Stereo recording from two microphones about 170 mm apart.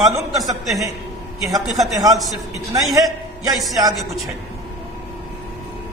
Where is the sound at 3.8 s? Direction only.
20° right (ahead or behind).